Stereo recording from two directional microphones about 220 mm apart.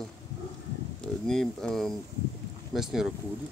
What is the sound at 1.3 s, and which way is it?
Speech, centre (ahead or behind).